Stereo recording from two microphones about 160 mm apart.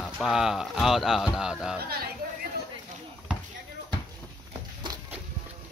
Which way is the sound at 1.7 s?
75° right (ahead or behind).